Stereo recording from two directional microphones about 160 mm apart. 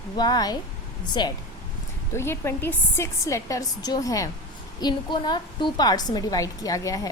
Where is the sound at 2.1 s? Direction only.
15° left (ahead or behind).